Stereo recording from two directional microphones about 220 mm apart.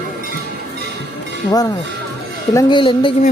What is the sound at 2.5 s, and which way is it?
Speech, 20° left (ahead or behind).